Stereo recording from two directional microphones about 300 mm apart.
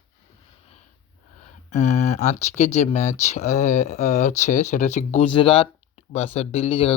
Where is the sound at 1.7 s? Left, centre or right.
Left.